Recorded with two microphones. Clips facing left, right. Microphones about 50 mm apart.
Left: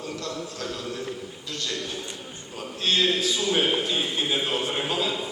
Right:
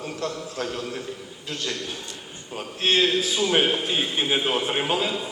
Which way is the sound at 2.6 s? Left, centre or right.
Right.